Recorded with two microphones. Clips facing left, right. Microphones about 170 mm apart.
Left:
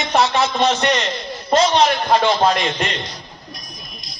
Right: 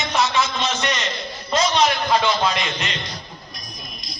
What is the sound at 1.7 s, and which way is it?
A man's voice, 55° left (ahead or behind).